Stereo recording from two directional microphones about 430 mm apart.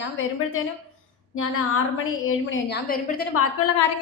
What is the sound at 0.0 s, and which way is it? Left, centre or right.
A woman's voice, left.